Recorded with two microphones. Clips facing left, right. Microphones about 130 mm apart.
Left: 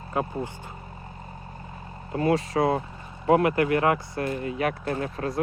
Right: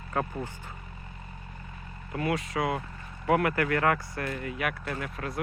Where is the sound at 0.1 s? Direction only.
20° left (ahead or behind).